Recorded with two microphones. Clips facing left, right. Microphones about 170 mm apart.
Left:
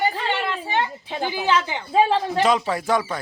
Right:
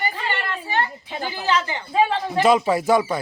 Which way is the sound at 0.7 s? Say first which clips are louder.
Left 1 dB; 15° left (ahead or behind).